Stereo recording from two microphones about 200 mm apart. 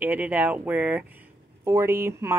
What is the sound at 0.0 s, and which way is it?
Speech, 10° right (ahead or behind).